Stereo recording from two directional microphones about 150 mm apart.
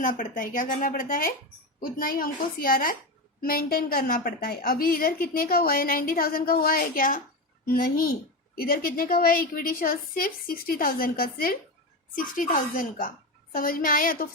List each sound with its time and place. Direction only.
0.0 s a woman's voice: 65° left (ahead or behind)
8.5 s a woman's voice: 85° left
12.1 s a woman's voice: 65° left (ahead or behind)